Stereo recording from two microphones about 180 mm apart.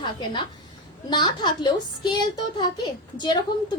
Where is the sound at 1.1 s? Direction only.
25° left (ahead or behind).